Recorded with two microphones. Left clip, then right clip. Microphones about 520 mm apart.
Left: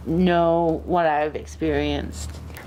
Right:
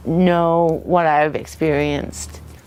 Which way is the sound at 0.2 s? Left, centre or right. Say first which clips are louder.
Right 4 dB; right.